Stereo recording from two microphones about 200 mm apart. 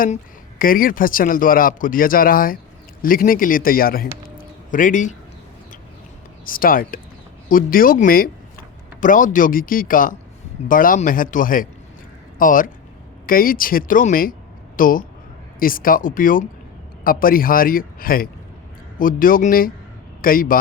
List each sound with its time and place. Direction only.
0.6 s speech: 45° left (ahead or behind)
6.4 s speech: 45° left (ahead or behind)